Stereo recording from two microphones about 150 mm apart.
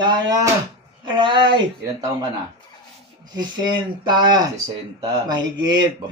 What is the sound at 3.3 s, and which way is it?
Speech, 30° right (ahead or behind).